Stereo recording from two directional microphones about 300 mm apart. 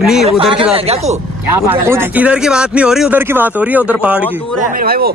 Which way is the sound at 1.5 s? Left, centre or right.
Centre.